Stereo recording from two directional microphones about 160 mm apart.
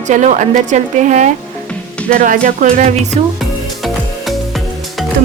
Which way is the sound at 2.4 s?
55° right (ahead or behind).